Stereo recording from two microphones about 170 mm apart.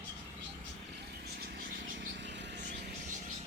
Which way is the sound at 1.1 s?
65° right (ahead or behind).